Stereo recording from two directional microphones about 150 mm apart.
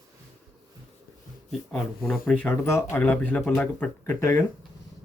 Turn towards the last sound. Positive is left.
turn(degrees=15)  # may be behind; listen again after turning